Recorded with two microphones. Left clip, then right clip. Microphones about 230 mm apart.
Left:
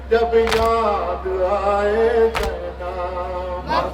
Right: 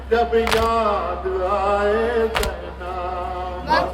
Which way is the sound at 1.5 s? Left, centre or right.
Centre.